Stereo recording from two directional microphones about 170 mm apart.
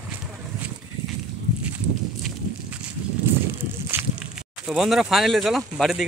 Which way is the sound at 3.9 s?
15° right (ahead or behind).